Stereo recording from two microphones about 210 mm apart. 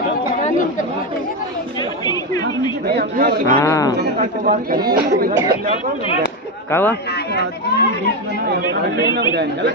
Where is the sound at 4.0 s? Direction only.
45° right (ahead or behind).